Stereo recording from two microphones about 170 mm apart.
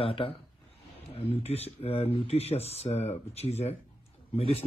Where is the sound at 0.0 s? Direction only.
35° left (ahead or behind).